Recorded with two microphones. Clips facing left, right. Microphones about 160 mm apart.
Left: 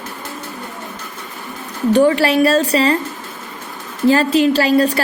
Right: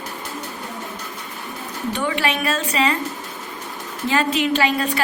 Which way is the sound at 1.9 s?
35° left (ahead or behind).